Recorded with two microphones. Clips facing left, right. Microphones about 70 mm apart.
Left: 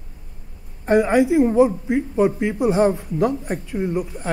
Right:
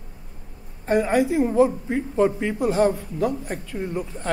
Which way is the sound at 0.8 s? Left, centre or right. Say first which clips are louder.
Left 4 dB; centre.